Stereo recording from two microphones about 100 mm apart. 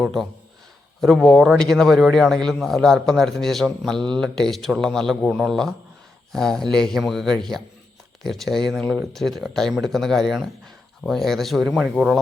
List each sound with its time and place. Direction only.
0.0 s a man's voice: centre (ahead or behind)